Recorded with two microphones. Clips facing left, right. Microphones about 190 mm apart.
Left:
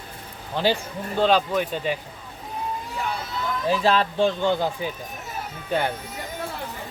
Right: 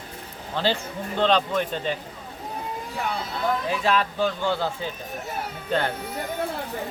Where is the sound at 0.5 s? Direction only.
15° left (ahead or behind).